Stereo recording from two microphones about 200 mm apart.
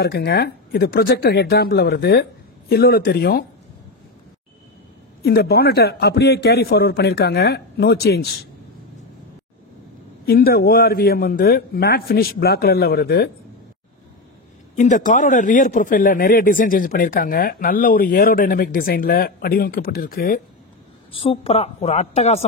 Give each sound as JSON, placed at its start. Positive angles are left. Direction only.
{"t": 0.0, "sound": "speech", "side_deg": 55}
{"t": 5.2, "sound": "speech", "side_deg": 50}
{"t": 10.2, "sound": "speech", "side_deg": 50}
{"t": 14.8, "sound": "speech", "side_deg": 40}
{"t": 21.1, "sound": "a woman's voice", "side_deg": 30}